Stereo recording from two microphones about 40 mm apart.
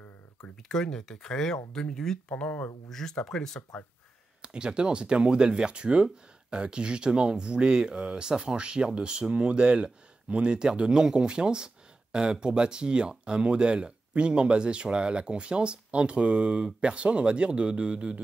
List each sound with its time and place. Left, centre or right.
0.4 s speech: centre
4.4 s speech: right